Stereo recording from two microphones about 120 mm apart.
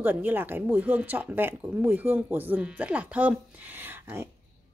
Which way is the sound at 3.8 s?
15° right (ahead or behind).